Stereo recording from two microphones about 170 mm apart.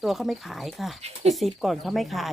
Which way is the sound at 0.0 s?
Centre (ahead or behind).